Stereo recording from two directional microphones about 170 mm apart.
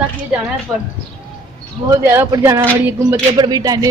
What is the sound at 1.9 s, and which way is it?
Speech, 15° right (ahead or behind).